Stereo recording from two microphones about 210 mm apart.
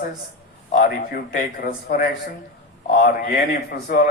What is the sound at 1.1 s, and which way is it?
Speech, 40° left (ahead or behind).